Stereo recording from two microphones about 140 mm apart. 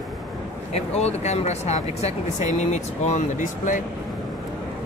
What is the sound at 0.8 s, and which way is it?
Speech, 50° left (ahead or behind).